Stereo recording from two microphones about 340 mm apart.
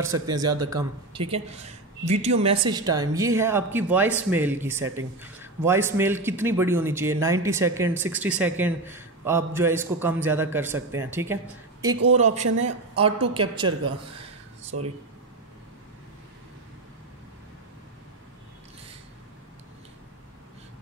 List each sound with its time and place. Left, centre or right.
0.1 s a man's voice: centre
12.1 s speech: centre